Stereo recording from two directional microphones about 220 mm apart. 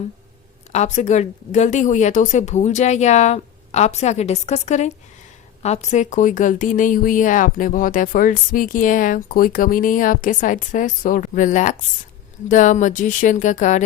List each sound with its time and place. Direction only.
0.7 s a woman's voice: 30° left (ahead or behind)